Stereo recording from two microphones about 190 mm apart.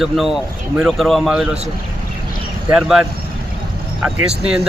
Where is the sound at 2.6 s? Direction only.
5° right (ahead or behind).